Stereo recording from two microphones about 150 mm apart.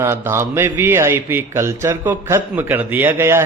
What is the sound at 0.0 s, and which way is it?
A man's voice, 15° right (ahead or behind).